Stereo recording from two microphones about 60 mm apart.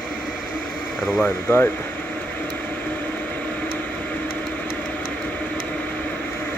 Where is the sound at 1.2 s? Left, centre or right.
Left.